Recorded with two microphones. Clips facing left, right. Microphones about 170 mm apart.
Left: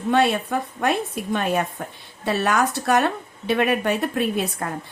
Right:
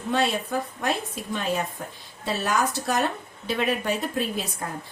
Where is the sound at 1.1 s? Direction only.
60° left (ahead or behind).